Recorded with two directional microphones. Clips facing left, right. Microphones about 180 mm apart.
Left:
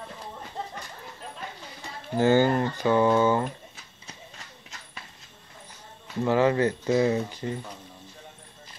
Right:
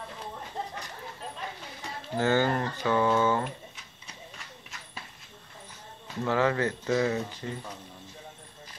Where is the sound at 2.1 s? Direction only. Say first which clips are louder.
Left 5 dB; 15° left (ahead or behind).